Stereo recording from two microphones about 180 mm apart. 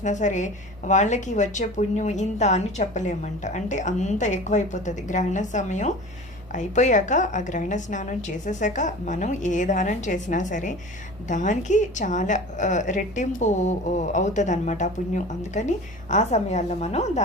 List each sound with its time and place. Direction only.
0.0 s a woman's voice: 40° left (ahead or behind)